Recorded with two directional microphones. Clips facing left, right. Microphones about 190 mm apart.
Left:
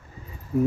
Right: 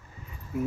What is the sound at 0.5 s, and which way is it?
Speech, 35° left (ahead or behind).